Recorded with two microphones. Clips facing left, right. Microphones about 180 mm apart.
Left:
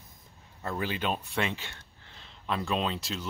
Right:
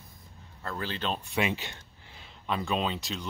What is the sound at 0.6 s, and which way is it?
Speech, 15° left (ahead or behind).